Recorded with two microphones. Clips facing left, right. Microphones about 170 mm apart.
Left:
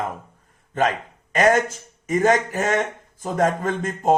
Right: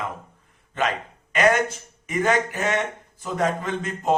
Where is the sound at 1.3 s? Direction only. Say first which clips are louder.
Left 2 dB; 45° left (ahead or behind).